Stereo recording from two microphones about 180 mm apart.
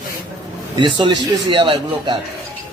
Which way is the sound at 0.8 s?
25° right (ahead or behind).